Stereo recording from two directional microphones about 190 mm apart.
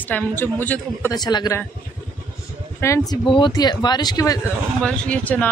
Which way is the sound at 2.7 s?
15° left (ahead or behind).